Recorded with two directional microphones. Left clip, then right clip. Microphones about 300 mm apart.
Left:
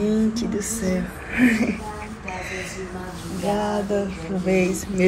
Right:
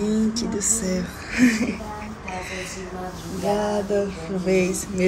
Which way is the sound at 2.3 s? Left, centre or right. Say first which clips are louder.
Left 1 dB; centre.